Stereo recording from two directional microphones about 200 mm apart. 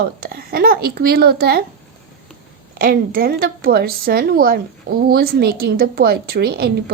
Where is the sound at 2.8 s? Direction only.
45° right (ahead or behind).